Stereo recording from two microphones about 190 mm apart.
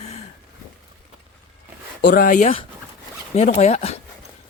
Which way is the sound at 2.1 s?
45° left (ahead or behind).